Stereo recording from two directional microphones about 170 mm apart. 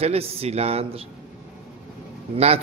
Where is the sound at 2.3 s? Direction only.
35° right (ahead or behind).